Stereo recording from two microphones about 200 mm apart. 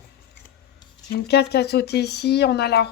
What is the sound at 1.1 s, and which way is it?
Speech, 55° left (ahead or behind).